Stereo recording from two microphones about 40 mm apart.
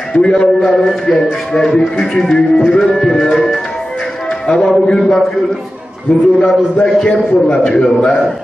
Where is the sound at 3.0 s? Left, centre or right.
Centre.